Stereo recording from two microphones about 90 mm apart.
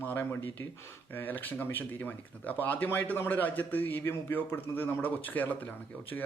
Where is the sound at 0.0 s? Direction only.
20° left (ahead or behind).